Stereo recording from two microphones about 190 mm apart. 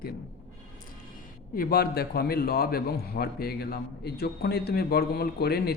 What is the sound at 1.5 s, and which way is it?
A man's voice, 50° left (ahead or behind).